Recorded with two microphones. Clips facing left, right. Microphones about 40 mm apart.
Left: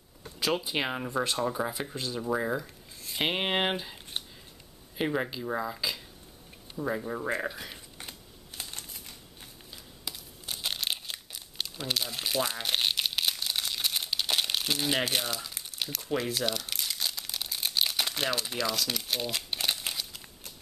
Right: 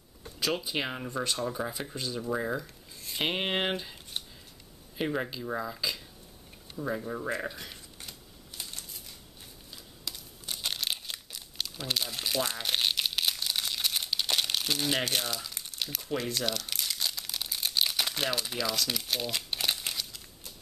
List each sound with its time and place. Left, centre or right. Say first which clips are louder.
0.2 s speech: left 2 dB; centre
4.9 s speech: left 2 dB; centre
8.0 s a sound: left 2 dB; centre
10.0 s crumpling: even; centre